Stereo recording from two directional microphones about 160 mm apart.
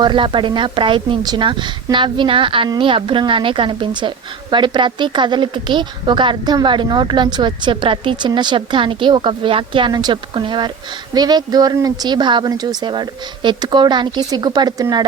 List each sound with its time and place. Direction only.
0.0 s a woman's voice: 30° right (ahead or behind)